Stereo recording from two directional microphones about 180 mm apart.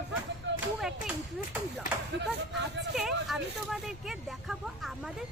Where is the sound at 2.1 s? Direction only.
75° right (ahead or behind).